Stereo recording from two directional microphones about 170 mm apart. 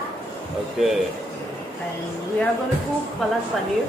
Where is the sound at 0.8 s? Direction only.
Centre (ahead or behind).